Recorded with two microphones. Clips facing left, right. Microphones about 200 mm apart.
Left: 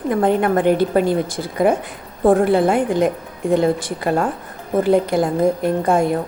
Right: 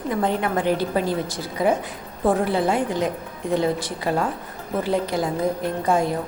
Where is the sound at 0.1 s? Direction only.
55° left (ahead or behind).